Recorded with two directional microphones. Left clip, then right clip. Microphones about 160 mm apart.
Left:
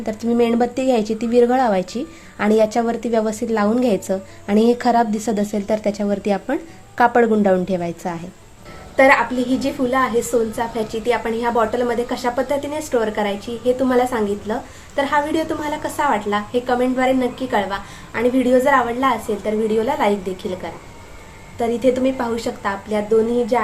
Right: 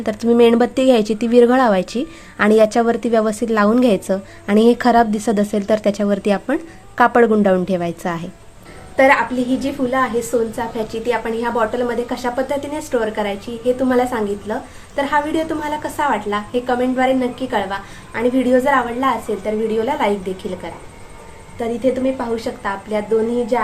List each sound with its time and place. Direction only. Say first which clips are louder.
0.0 s speech: right 6 dB; 25° right (ahead or behind)
9.0 s a woman's voice: even; 5° right (ahead or behind)
21.6 s a woman's voice: left 1 dB; 15° left (ahead or behind)